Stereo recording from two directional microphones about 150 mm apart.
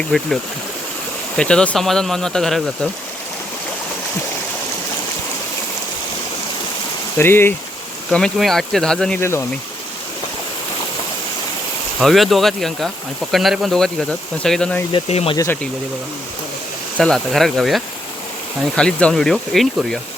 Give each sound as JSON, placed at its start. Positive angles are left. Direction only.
{"t": 0.1, "sound": "speech", "side_deg": 5}
{"t": 1.4, "sound": "speech", "side_deg": 5}
{"t": 7.2, "sound": "speech", "side_deg": 15}
{"t": 8.1, "sound": "speech", "side_deg": 5}
{"t": 11.9, "sound": "speech", "side_deg": 0}
{"t": 14.9, "sound": "speech", "side_deg": 40}
{"t": 17.0, "sound": "speech", "side_deg": 0}